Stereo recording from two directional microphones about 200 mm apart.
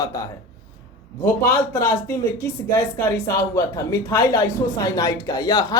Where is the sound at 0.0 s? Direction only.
15° left (ahead or behind).